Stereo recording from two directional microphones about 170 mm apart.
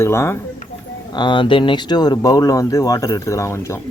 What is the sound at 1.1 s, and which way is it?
Speech, 25° left (ahead or behind).